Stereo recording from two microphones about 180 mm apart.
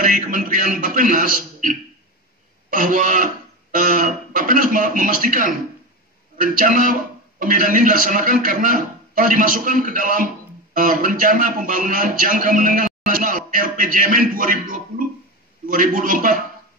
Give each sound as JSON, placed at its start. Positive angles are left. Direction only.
{"t": 0.0, "sound": "a man's voice", "side_deg": -50}